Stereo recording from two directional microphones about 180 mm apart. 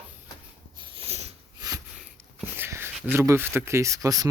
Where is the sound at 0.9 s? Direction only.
35° right (ahead or behind).